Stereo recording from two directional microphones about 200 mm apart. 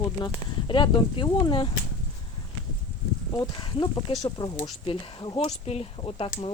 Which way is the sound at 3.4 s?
20° left (ahead or behind).